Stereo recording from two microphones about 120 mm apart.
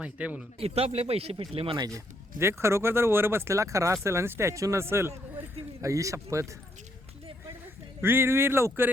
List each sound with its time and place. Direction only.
0.0 s speech: 10° right (ahead or behind)
0.6 s speech: 60° right (ahead or behind)
2.4 s speech: 20° right (ahead or behind)
8.0 s speech: 20° right (ahead or behind)